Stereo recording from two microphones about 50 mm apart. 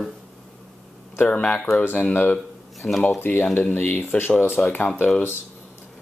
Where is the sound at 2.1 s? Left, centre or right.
Left.